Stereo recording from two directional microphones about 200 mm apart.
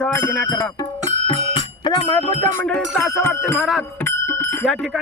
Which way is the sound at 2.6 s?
5° left (ahead or behind).